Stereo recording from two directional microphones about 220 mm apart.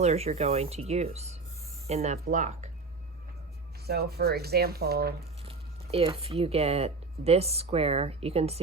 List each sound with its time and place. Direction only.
0.0 s speech: 30° right (ahead or behind)
3.8 s speech: 45° right (ahead or behind)
5.5 s speech: 25° right (ahead or behind)